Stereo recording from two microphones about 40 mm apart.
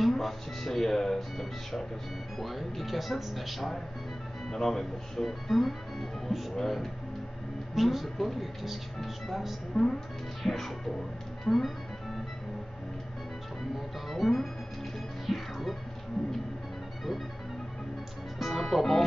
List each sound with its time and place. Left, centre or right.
0.0 s speech: centre
9.8 s speech: centre
10.4 s speech: centre
14.0 s speech: centre
15.2 s music: centre
18.4 s music: centre